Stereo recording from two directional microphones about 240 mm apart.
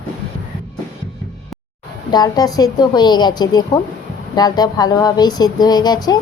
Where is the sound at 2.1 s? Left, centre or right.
Centre.